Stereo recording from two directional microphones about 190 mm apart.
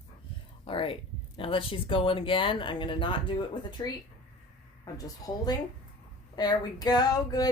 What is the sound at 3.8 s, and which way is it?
Female singing, 25° left (ahead or behind).